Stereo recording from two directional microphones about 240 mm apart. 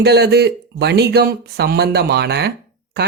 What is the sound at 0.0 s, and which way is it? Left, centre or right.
Speech, right.